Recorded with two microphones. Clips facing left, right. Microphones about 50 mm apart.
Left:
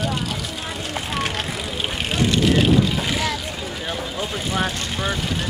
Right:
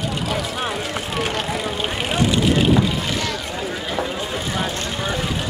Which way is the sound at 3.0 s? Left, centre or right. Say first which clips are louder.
Left 1 dB; centre.